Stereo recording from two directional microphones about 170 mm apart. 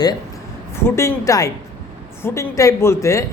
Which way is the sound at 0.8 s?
15° left (ahead or behind).